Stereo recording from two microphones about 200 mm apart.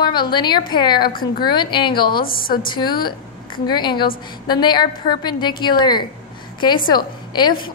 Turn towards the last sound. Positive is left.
turn(degrees=20)  # may be behind; listen again after turning